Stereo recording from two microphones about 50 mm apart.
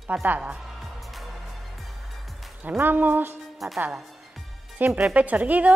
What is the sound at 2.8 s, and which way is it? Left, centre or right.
Speech, right.